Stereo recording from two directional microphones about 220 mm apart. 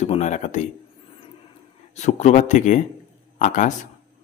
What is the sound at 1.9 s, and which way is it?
A man's voice, 30° left (ahead or behind).